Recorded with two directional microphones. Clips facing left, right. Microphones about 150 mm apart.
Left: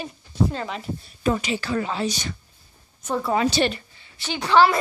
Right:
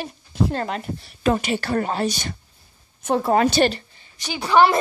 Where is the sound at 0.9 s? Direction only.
75° right (ahead or behind).